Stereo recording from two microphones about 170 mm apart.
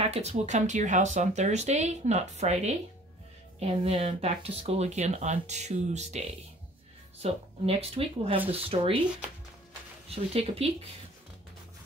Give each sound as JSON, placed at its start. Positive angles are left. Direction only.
{"t": 0.0, "sound": "speech", "side_deg": -40}
{"t": 10.0, "sound": "speech", "side_deg": -35}